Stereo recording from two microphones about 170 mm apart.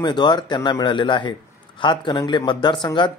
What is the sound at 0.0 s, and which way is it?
Speech, 25° left (ahead or behind).